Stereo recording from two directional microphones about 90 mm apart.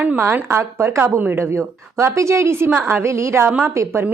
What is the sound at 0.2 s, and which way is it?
A woman's voice, 25° right (ahead or behind).